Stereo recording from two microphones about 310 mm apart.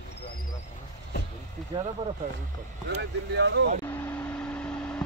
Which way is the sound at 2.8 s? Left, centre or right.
Right.